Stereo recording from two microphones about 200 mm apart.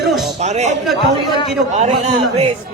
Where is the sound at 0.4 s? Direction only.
35° right (ahead or behind).